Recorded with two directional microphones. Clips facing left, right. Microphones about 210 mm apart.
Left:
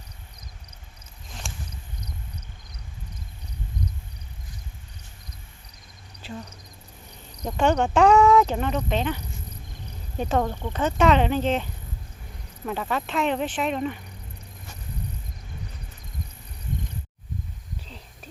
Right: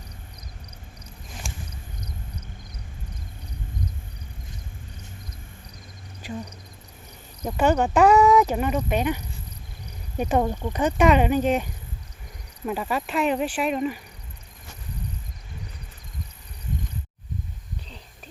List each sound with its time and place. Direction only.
7.4 s speech: 5° right (ahead or behind)
10.2 s speech: 15° right (ahead or behind)